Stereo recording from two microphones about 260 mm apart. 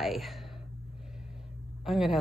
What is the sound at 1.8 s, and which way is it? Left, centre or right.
Speech, centre.